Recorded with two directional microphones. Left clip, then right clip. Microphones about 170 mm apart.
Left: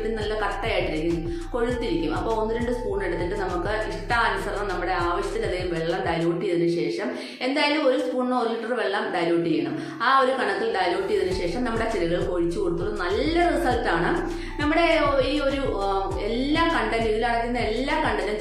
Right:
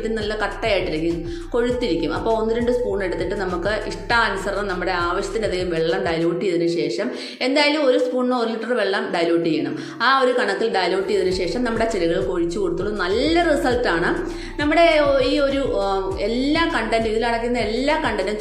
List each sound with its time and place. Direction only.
7.5 s a woman's voice: 35° right (ahead or behind)
10.0 s a woman's voice: 40° right (ahead or behind)
13.2 s a woman's voice: 40° right (ahead or behind)
16.5 s a woman's voice: 35° right (ahead or behind)